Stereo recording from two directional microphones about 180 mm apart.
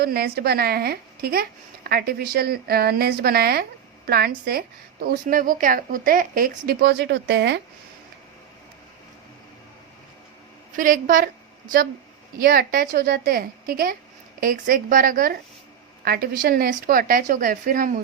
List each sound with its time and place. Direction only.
0.0 s a woman's voice: 60° right (ahead or behind)
10.7 s a woman's voice: 45° right (ahead or behind)
12.4 s a woman's voice: 55° right (ahead or behind)